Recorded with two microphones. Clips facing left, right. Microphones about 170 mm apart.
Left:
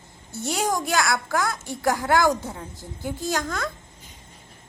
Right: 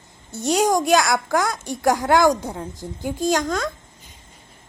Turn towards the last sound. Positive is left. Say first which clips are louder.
# right 6 dB
turn(degrees=-20)  # may be behind; listen again after turning